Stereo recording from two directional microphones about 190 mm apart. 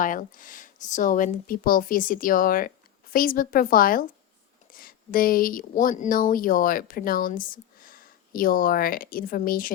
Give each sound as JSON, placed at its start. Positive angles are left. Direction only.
{"t": 0.0, "sound": "speech", "side_deg": 45}